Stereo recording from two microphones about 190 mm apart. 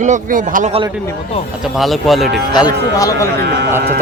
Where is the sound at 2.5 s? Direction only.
20° left (ahead or behind).